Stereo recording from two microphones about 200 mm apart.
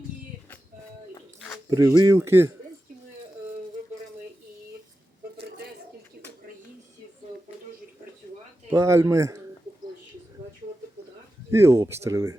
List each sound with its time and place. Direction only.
1.7 s speech: 15° right (ahead or behind)
8.7 s speech: 15° right (ahead or behind)
11.5 s speech: 15° right (ahead or behind)